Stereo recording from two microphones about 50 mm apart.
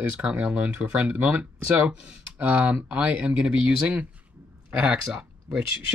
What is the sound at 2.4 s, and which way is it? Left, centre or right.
Speech, right.